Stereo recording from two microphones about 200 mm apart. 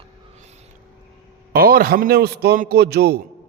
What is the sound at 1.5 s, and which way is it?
A man's voice, 45° right (ahead or behind).